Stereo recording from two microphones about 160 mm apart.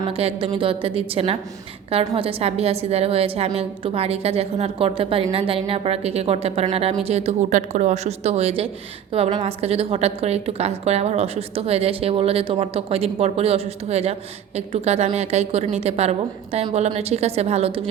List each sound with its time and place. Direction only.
0.1 s a woman's voice: 35° right (ahead or behind)